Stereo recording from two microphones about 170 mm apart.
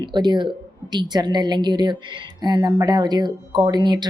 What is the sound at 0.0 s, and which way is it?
Speech, 25° right (ahead or behind).